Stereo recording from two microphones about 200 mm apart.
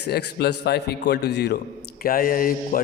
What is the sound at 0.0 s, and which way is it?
A man's voice, 55° left (ahead or behind).